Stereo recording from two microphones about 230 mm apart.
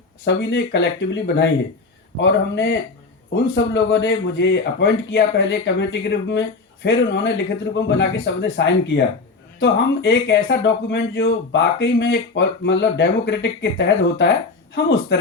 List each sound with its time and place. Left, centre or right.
0.3 s speech: left